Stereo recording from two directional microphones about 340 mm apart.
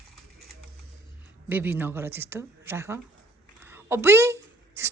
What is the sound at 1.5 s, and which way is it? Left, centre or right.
A woman's voice, centre.